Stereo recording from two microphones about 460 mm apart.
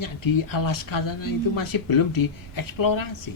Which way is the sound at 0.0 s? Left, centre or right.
Left.